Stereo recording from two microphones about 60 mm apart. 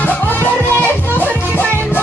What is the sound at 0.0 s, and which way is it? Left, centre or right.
Music, left.